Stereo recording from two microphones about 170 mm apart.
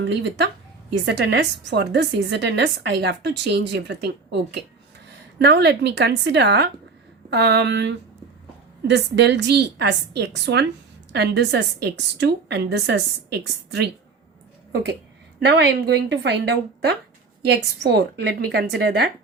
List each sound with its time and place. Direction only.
0.0 s a woman's voice: 90° right
5.4 s a woman's voice: 75° right (ahead or behind)
15.4 s a woman's voice: 90° right